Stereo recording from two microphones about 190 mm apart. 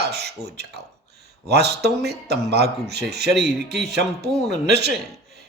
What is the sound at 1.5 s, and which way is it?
A man's voice, 60° right (ahead or behind).